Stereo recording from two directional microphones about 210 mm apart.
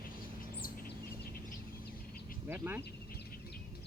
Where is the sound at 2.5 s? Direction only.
10° right (ahead or behind).